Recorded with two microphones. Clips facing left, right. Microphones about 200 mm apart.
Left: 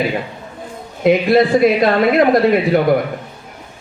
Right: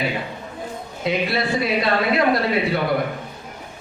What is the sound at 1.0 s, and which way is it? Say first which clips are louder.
A man's voice: left 11 dB; 50° left (ahead or behind).